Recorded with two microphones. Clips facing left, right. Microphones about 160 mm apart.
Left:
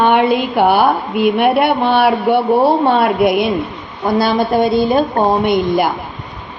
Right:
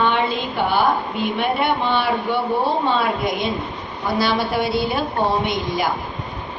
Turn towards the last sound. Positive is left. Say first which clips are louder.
# left 8 dB
turn(degrees=55)  # may be behind; listen again after turning